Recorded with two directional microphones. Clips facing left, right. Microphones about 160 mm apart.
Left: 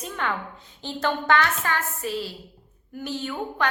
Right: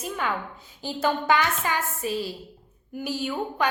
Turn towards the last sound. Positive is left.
turn(degrees=-10)  # may be behind; listen again after turning